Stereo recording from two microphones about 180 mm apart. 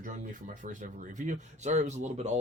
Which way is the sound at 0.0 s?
45° right (ahead or behind).